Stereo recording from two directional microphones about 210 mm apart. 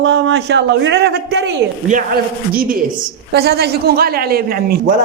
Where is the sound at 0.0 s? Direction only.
60° right (ahead or behind).